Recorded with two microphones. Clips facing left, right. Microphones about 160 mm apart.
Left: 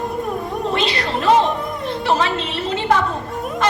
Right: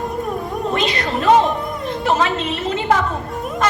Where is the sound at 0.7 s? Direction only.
30° left (ahead or behind).